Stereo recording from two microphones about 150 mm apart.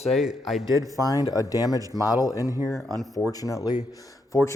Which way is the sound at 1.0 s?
25° left (ahead or behind).